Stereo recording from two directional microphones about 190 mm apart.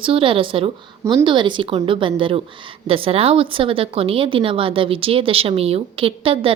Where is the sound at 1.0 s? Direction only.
15° right (ahead or behind).